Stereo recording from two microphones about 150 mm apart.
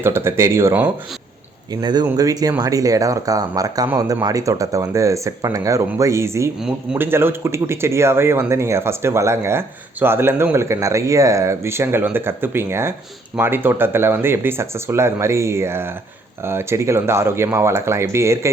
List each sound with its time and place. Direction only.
0.0 s speech: 15° right (ahead or behind)
1.7 s speech: 30° right (ahead or behind)
6.6 s speech: 5° right (ahead or behind)